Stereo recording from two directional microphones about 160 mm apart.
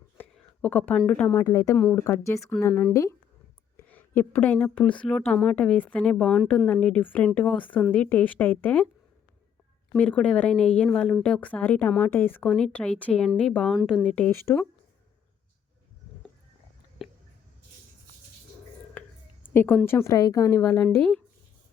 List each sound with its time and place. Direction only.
0.2 s a woman's voice: 10° left (ahead or behind)
10.0 s a woman's voice: 5° left (ahead or behind)
18.9 s a woman's voice: 10° left (ahead or behind)